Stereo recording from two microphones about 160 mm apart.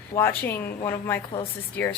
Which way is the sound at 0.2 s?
15° left (ahead or behind).